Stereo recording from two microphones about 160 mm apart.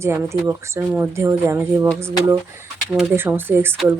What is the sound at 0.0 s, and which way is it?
Speech, 15° right (ahead or behind).